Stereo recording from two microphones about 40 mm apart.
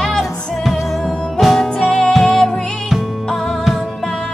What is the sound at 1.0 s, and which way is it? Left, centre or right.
Music, centre.